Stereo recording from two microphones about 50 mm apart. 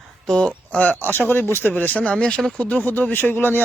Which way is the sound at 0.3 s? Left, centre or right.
Centre.